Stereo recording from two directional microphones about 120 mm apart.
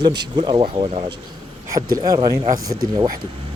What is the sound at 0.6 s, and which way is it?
Speech, 55° right (ahead or behind).